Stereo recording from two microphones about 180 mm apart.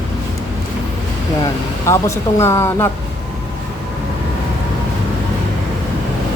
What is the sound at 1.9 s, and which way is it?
Speech, 15° left (ahead or behind).